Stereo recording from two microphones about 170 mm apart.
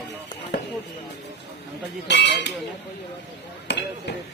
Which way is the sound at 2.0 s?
90° left.